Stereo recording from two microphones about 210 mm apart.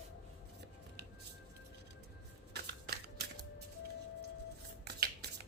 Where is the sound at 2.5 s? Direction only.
50° right (ahead or behind).